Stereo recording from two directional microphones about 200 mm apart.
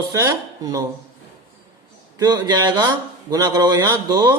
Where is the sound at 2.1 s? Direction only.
20° right (ahead or behind).